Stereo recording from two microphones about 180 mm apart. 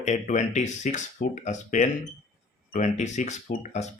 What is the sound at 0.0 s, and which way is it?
A man's voice, 40° left (ahead or behind).